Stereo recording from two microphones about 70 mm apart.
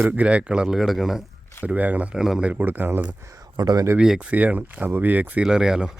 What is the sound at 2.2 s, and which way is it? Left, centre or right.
Speech, centre.